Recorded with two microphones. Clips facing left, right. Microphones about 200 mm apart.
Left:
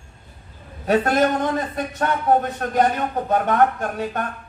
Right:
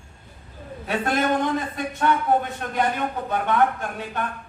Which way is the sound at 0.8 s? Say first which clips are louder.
Left 5 dB; 40° left (ahead or behind).